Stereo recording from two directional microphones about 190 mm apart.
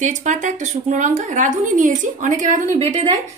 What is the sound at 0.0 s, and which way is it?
A woman's voice, 40° right (ahead or behind).